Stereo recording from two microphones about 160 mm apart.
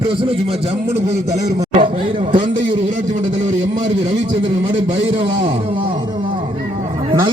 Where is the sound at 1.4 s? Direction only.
20° right (ahead or behind).